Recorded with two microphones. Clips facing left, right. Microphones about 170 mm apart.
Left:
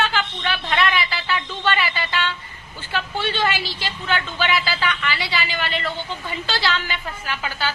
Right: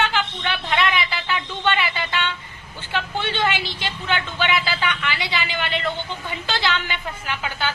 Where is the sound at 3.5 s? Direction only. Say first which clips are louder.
Even; 20° right (ahead or behind).